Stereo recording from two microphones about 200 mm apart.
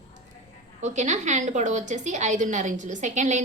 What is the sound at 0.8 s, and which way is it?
A woman's voice, 35° right (ahead or behind).